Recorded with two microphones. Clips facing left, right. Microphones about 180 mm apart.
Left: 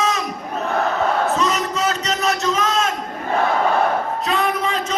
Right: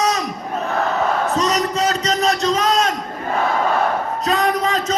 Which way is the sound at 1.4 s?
40° right (ahead or behind).